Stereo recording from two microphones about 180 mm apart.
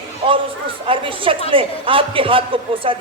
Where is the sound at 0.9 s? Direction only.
30° right (ahead or behind).